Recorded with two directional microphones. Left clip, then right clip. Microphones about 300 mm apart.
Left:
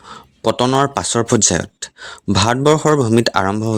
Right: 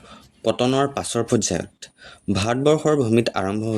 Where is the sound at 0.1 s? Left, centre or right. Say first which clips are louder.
Left 5 dB; left.